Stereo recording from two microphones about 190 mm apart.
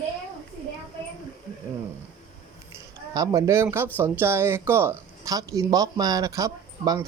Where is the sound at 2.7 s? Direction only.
15° right (ahead or behind).